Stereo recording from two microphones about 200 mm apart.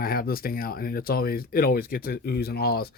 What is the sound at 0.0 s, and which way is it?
Speech, 45° left (ahead or behind).